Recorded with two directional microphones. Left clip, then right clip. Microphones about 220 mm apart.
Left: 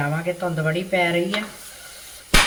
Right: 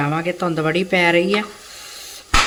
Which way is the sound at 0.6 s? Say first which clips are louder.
Right 5 dB; 60° right (ahead or behind).